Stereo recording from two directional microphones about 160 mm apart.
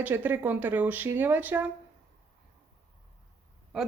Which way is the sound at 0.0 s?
10° right (ahead or behind).